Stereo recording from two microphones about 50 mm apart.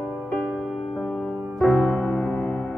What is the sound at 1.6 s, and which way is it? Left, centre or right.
Music, centre.